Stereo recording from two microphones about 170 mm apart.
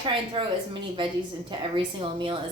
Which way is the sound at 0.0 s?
30° right (ahead or behind).